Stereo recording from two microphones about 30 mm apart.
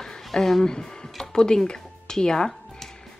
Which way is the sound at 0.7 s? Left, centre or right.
Left.